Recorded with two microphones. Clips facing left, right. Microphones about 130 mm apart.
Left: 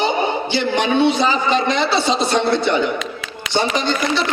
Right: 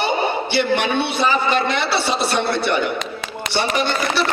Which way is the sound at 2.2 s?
15° left (ahead or behind).